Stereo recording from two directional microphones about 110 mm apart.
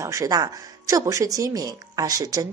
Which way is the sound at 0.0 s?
30° right (ahead or behind).